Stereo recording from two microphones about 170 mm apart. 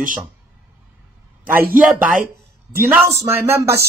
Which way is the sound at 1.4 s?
10° right (ahead or behind).